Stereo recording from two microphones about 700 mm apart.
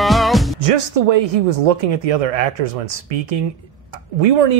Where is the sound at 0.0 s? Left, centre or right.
Centre.